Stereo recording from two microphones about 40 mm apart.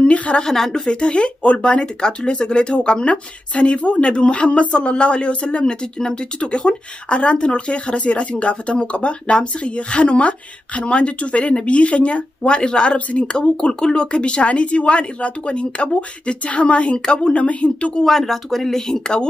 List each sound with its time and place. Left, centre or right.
0.0 s a sound: left
0.5 s speech: centre
0.8 s speech: left
18.0 s speech: centre